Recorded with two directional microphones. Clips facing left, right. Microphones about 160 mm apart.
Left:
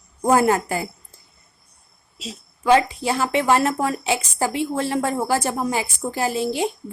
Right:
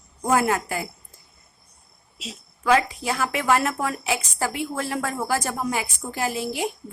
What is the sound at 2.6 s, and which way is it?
Speech, 25° left (ahead or behind).